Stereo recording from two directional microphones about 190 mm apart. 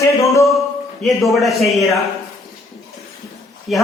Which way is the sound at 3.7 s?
Centre (ahead or behind).